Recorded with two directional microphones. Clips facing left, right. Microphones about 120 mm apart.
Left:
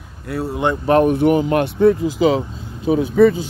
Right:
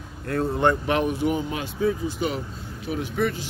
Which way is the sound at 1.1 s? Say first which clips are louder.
Left 10 dB; 65° left (ahead or behind).